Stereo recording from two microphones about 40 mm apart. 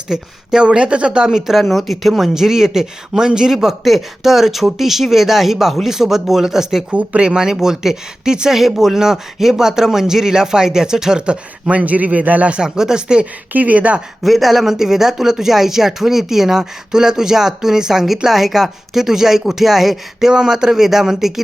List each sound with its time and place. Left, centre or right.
0.1 s speech: centre
0.6 s speech: right
1.5 s speech: centre
6.9 s speech: right
7.3 s speech: centre
11.3 s speech: right
12.5 s speech: centre
13.5 s speech: right
14.3 s speech: centre